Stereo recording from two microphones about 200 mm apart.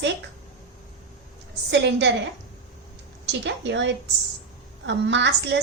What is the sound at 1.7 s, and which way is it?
Speech, 60° right (ahead or behind).